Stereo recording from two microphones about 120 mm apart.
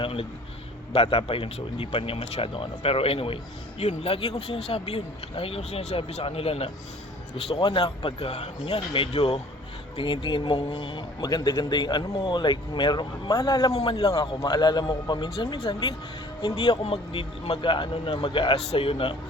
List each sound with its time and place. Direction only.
0.0 s a man's voice: 50° left (ahead or behind)
11.2 s a man's voice: 35° left (ahead or behind)
14.3 s a man's voice: 35° left (ahead or behind)